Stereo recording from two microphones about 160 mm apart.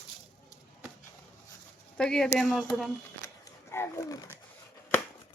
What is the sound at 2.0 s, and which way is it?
Speech, 5° left (ahead or behind).